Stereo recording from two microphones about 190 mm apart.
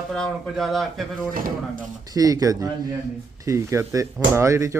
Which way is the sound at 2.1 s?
20° right (ahead or behind).